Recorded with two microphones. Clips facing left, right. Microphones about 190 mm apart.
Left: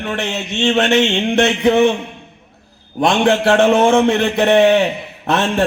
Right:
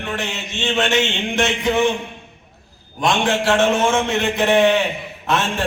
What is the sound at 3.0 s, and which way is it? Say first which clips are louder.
A man's voice: left 5 dB; 60° left (ahead or behind).